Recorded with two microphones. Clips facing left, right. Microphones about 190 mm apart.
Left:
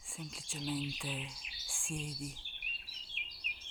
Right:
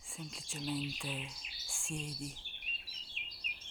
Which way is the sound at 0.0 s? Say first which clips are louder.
Even; centre (ahead or behind).